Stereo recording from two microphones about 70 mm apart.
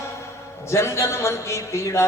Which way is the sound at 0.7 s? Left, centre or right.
Left.